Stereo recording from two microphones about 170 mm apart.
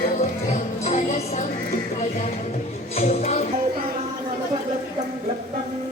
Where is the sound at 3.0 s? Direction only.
40° left (ahead or behind).